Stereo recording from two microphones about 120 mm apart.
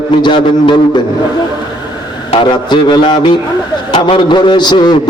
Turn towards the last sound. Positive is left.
turn(degrees=40)  # may be behind; listen again after turning